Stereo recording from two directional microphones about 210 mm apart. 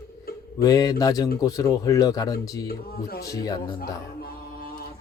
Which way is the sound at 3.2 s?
15° left (ahead or behind).